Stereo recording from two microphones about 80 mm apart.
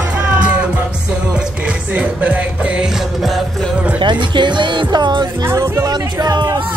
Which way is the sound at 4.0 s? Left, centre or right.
Right.